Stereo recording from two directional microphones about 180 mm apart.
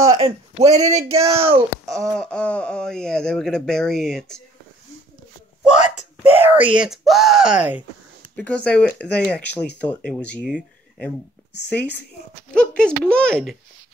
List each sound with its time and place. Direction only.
0.2 s speech: 35° right (ahead or behind)
1.9 s speech: 5° left (ahead or behind)
5.7 s speech: 35° left (ahead or behind)
6.4 s speech: 10° right (ahead or behind)
8.4 s speech: 5° left (ahead or behind)
12.5 s speech: 5° left (ahead or behind)